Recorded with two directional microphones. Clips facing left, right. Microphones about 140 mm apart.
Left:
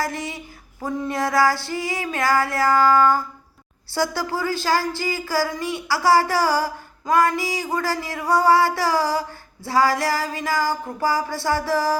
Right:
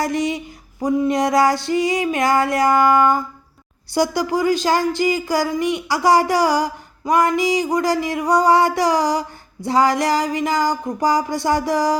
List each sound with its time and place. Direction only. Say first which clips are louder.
0.0 s female singing: right 7 dB; 20° right (ahead or behind)
3.9 s speech: right 5 dB; 15° right (ahead or behind)